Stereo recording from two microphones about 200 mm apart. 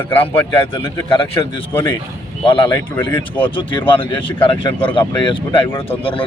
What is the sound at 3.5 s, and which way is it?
Speech, 25° left (ahead or behind).